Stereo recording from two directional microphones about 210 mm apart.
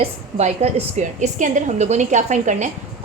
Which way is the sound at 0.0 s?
30° right (ahead or behind).